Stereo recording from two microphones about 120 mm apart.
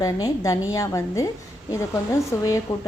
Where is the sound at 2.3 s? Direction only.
25° left (ahead or behind).